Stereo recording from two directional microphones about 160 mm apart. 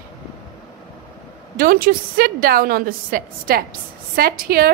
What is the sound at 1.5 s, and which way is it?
A woman's voice, 65° right (ahead or behind).